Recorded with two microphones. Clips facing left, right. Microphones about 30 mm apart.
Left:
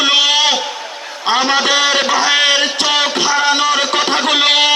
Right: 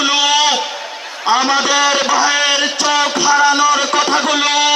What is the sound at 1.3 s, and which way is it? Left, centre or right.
Speech, left.